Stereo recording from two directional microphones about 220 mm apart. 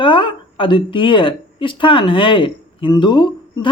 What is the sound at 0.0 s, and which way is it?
Speech, 20° left (ahead or behind).